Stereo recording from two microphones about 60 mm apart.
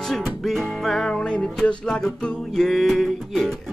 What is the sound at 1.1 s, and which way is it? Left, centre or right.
Music, centre.